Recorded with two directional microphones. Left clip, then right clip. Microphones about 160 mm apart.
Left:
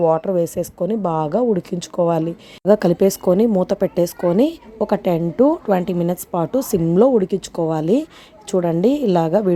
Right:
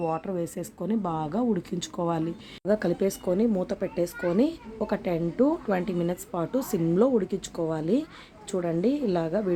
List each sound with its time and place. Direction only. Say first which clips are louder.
0.0 s a woman's voice: left 13 dB; 40° left (ahead or behind)